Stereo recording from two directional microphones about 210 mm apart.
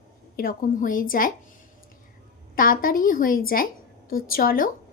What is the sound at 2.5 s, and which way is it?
A woman's voice, 40° left (ahead or behind).